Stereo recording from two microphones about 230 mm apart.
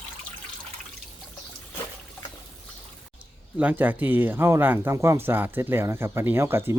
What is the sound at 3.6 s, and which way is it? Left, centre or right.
Speech, centre.